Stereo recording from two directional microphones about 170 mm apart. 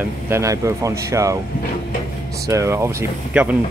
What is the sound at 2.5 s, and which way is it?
Speech, 15° right (ahead or behind).